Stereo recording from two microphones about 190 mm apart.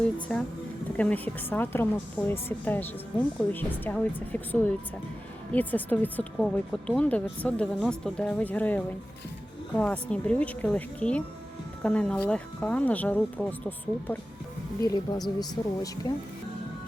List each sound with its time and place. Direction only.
0.0 s a woman's voice: 5° left (ahead or behind)
14.8 s speech: 20° left (ahead or behind)